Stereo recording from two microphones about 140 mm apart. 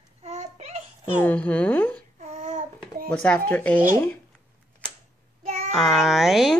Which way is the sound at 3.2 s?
10° left (ahead or behind).